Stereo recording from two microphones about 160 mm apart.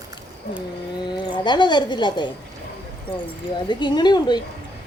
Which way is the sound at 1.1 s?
30° left (ahead or behind).